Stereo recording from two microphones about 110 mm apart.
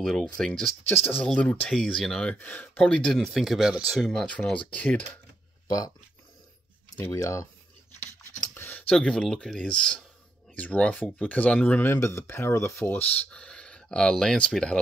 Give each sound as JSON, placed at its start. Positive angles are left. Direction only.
{"t": 0.0, "sound": "speech", "side_deg": 5}
{"t": 0.8, "sound": "speech", "side_deg": 20}
{"t": 1.2, "sound": "speech", "side_deg": 5}
{"t": 4.0, "sound": "speech", "side_deg": 5}
{"t": 7.1, "sound": "speech", "side_deg": 30}
{"t": 8.5, "sound": "speech", "side_deg": 15}
{"t": 12.8, "sound": "speech", "side_deg": 15}